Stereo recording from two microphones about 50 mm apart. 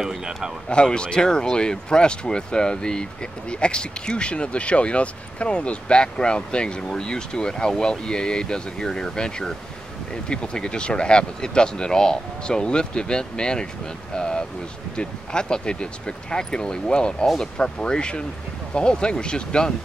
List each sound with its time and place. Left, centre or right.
0.0 s speech: centre
0.7 s speech: centre